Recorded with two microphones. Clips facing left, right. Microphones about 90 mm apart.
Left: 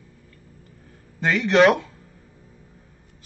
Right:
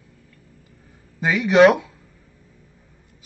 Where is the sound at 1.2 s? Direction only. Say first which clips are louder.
Right 3 dB; 5° right (ahead or behind).